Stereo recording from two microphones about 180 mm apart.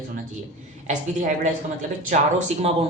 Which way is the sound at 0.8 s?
40° right (ahead or behind).